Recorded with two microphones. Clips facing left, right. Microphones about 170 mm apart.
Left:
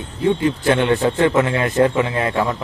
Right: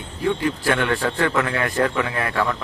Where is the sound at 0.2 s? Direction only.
20° left (ahead or behind).